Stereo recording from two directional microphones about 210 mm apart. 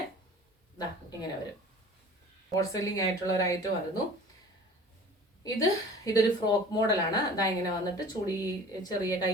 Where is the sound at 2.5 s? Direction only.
15° left (ahead or behind).